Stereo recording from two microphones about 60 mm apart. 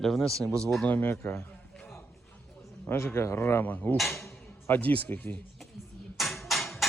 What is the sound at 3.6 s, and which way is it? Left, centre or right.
Speech, left.